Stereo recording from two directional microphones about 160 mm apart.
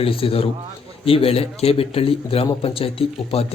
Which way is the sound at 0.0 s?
35° left (ahead or behind).